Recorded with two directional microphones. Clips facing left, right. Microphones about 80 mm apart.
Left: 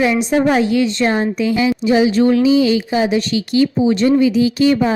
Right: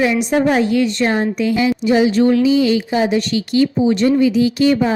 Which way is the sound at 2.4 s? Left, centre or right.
Left.